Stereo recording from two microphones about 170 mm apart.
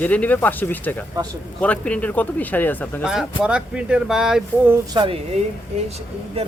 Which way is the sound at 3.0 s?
5° right (ahead or behind).